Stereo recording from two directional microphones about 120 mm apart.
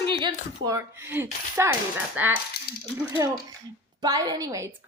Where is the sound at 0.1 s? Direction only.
40° right (ahead or behind); by 1.7 s 20° right (ahead or behind).